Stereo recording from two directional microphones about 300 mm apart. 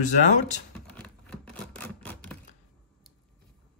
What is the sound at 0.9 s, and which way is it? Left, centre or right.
Typewriter, centre.